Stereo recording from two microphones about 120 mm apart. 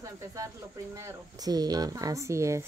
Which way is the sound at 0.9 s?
30° right (ahead or behind).